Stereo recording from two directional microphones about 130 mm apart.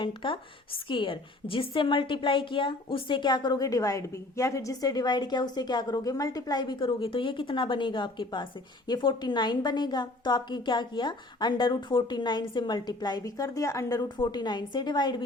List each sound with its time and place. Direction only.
0.0 s a woman's voice: 40° left (ahead or behind)